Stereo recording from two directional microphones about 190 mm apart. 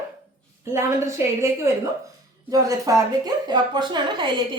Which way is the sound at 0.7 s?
15° right (ahead or behind).